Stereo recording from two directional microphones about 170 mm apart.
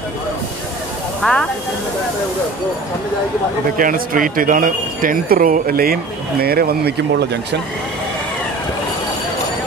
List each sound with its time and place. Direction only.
1.2 s speech: centre (ahead or behind)
3.7 s speech: 55° right (ahead or behind); by 7.6 s 80° right